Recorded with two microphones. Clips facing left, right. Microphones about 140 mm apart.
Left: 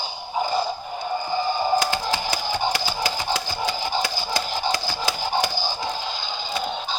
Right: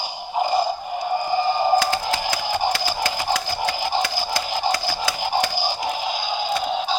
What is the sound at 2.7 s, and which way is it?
Music, 20° left (ahead or behind).